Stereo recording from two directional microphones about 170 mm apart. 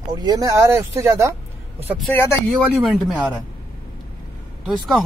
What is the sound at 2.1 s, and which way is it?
Speech, 15° left (ahead or behind).